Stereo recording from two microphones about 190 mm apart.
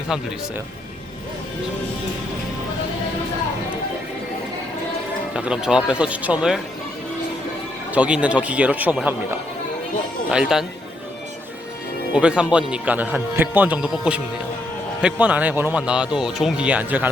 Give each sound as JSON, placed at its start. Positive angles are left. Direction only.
{"t": 5.3, "sound": "speech", "side_deg": -5}
{"t": 7.9, "sound": "speech", "side_deg": -5}
{"t": 12.1, "sound": "speech", "side_deg": -5}